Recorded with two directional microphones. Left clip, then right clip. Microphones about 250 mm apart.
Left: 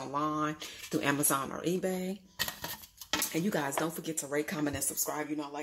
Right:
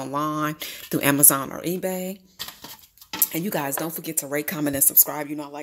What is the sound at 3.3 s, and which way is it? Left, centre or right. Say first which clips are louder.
Speech: right 9 dB; right.